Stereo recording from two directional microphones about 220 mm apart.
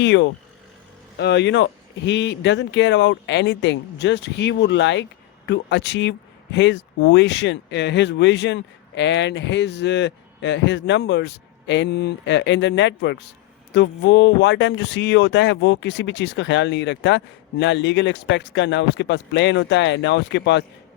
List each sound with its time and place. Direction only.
0.0 s speech: 55° left (ahead or behind)